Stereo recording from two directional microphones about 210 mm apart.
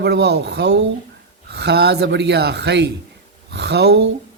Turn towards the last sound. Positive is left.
turn(degrees=-50)  # may be behind; listen again after turning